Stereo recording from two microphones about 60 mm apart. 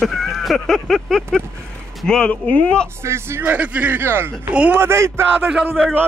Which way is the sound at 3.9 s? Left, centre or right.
Right.